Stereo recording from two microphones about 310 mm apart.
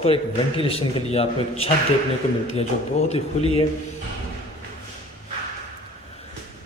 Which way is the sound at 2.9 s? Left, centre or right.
Left.